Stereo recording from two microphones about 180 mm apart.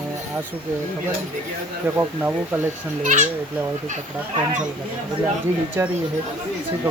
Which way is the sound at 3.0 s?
45° right (ahead or behind).